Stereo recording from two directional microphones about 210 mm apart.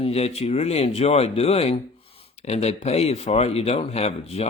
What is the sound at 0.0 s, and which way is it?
A man's voice, 30° left (ahead or behind).